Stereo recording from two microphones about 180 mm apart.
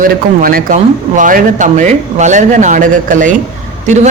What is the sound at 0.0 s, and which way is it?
A man's voice, 50° right (ahead or behind).